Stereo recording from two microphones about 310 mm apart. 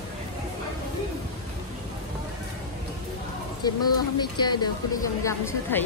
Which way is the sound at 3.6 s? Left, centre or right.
Centre.